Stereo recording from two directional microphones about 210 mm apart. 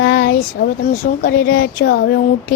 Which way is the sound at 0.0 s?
50° left (ahead or behind).